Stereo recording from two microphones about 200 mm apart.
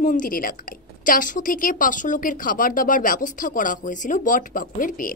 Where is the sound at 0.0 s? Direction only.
40° left (ahead or behind).